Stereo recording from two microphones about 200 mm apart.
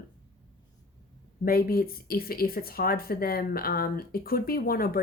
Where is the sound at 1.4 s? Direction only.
50° left (ahead or behind).